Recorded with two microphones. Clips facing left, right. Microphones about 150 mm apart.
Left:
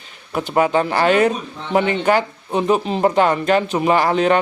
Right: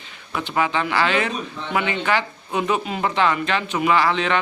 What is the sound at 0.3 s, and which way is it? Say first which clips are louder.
A man's voice: left 6 dB; 45° left (ahead or behind).